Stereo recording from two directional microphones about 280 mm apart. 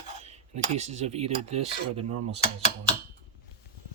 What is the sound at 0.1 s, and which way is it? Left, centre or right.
Cutlery, right.